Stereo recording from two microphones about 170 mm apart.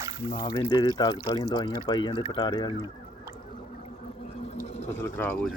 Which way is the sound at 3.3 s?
45° left (ahead or behind).